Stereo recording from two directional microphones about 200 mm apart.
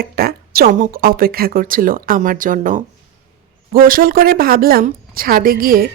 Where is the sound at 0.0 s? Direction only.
50° right (ahead or behind).